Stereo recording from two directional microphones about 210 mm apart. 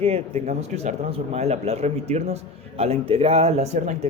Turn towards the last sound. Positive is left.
turn(degrees=-35)  # may be behind; listen again after turning